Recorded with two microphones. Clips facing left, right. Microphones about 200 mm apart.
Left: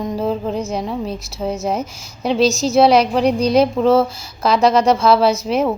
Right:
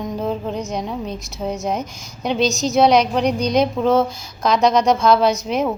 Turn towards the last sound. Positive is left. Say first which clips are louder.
# left 2 dB
turn(degrees=0)  # may be behind; listen again after turning